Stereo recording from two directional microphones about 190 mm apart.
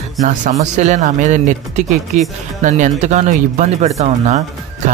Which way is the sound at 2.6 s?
40° right (ahead or behind).